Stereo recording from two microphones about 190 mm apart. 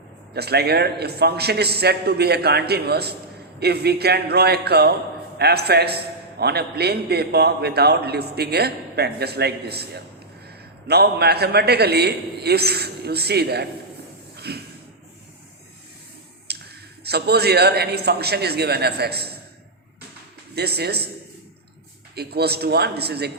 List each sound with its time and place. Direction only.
0.3 s a man's voice: 60° right (ahead or behind)
14.3 s a sound: 55° right (ahead or behind)
16.5 s clicking: 60° right (ahead or behind)
17.0 s a man's voice: 60° right (ahead or behind)
20.6 s a man's voice: 60° right (ahead or behind)
22.1 s a man's voice: 60° right (ahead or behind)